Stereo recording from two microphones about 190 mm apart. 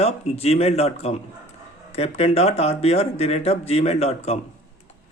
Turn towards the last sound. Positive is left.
turn(degrees=35)  # may be behind; listen again after turning